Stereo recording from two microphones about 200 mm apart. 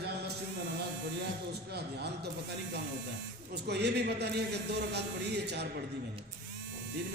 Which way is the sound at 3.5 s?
55° right (ahead or behind).